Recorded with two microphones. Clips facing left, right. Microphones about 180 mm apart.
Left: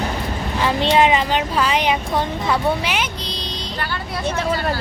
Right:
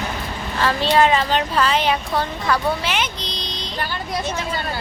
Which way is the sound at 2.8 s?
10° left (ahead or behind).